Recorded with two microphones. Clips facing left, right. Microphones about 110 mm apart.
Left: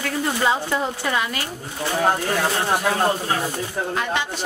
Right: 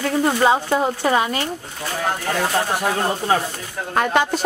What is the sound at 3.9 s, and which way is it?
Speech, 50° right (ahead or behind).